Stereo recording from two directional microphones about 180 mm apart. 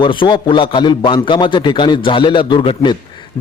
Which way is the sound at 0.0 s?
25° left (ahead or behind).